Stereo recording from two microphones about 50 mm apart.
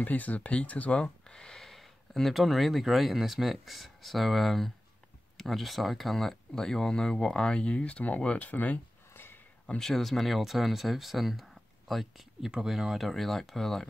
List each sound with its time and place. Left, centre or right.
0.0 s speech: left
9.1 s a sound: left
9.8 s speech: centre